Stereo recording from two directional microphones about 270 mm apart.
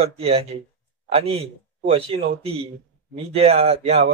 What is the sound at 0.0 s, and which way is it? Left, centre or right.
Speech, right.